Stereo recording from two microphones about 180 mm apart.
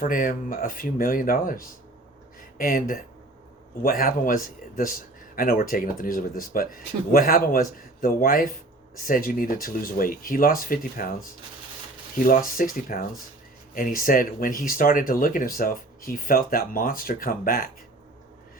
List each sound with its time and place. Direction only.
0.0 s a man's voice: 50° left (ahead or behind)
12.1 s a man's voice: 50° left (ahead or behind)